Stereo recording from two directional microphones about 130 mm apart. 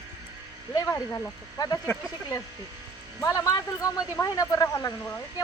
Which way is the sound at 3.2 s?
25° left (ahead or behind).